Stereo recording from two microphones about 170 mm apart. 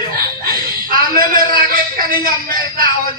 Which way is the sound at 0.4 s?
55° right (ahead or behind).